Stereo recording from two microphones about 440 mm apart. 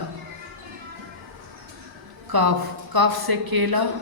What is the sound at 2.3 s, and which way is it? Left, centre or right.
A woman's voice, right.